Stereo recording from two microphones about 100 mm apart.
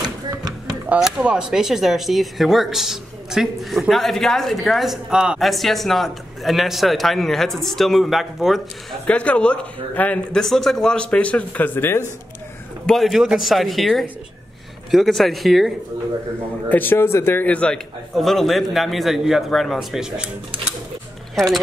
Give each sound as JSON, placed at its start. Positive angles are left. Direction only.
{"t": 0.8, "sound": "speech", "side_deg": -10}
{"t": 9.0, "sound": "a man's voice", "side_deg": 15}
{"t": 10.3, "sound": "a man's voice", "side_deg": 5}
{"t": 12.8, "sound": "speech", "side_deg": 0}
{"t": 16.6, "sound": "speech", "side_deg": 20}
{"t": 18.1, "sound": "speech", "side_deg": 0}